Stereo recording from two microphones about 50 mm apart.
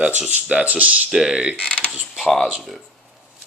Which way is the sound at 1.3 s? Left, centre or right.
Centre.